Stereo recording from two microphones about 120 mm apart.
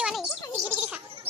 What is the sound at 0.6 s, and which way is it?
Gargling, 15° right (ahead or behind).